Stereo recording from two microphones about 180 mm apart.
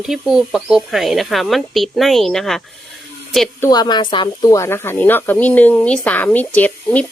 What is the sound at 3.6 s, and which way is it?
Speech, 20° left (ahead or behind).